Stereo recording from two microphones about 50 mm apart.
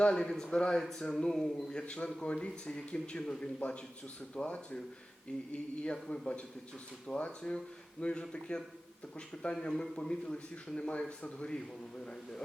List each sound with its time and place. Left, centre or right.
0.0 s a man's voice: centre